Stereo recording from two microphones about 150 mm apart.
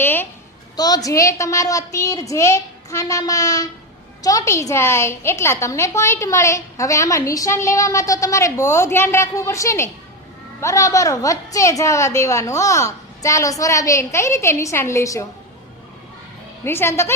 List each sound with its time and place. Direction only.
0.0 s a sound: 15° left (ahead or behind)
0.8 s a woman's voice: 25° left (ahead or behind)
16.6 s speech: 15° left (ahead or behind)